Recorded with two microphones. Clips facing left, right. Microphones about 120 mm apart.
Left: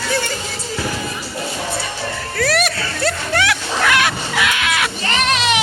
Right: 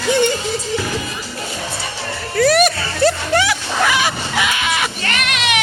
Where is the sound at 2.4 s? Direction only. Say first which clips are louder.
Right 6 dB; centre (ahead or behind).